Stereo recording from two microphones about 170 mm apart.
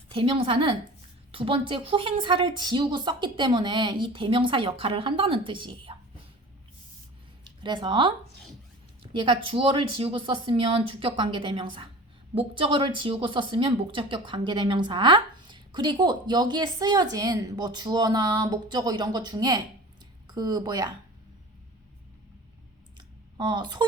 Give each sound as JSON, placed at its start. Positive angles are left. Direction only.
{"t": 0.1, "sound": "speech", "side_deg": -30}
{"t": 7.4, "sound": "speech", "side_deg": -30}
{"t": 9.1, "sound": "speech", "side_deg": -30}
{"t": 23.0, "sound": "a sound", "side_deg": -25}